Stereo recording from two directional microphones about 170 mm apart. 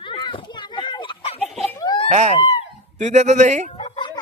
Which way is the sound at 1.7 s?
25° left (ahead or behind).